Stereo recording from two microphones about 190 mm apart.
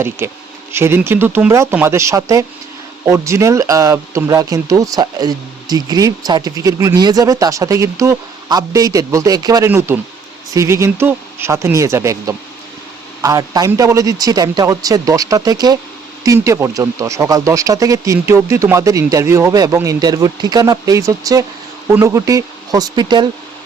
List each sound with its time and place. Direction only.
0.2 s a man's voice: 10° right (ahead or behind)